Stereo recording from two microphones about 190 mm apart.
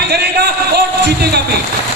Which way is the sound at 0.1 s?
60° right (ahead or behind).